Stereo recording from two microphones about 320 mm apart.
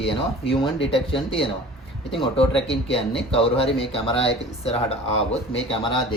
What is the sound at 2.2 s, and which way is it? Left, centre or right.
Speech, centre.